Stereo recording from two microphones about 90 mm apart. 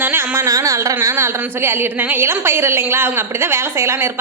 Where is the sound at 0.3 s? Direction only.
40° right (ahead or behind).